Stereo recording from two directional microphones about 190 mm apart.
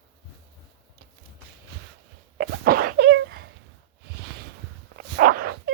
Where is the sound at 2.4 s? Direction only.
50° right (ahead or behind).